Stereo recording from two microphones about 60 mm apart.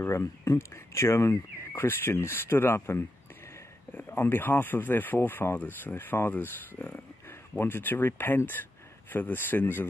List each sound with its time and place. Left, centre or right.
0.0 s speech: left
1.8 s speech: left